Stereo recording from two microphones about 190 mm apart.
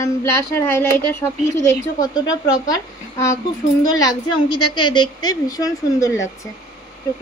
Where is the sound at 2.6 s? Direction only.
15° left (ahead or behind).